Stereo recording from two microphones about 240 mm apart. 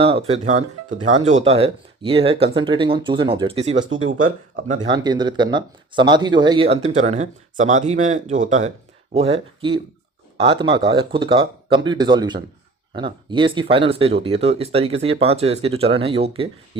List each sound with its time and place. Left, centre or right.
0.0 s speech: right